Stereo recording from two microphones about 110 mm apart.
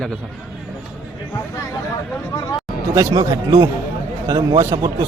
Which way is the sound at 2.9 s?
30° right (ahead or behind).